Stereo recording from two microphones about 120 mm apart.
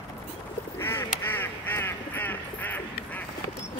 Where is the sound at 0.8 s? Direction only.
20° left (ahead or behind).